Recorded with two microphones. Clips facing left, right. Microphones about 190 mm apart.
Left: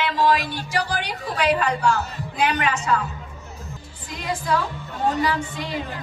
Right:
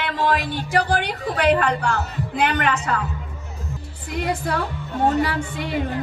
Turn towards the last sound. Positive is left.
turn(degrees=-55)  # may be behind; listen again after turning